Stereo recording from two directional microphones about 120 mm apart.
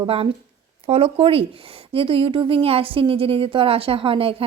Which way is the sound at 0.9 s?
55° right (ahead or behind).